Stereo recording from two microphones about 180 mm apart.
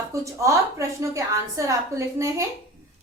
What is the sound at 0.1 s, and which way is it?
A woman's voice, 15° right (ahead or behind).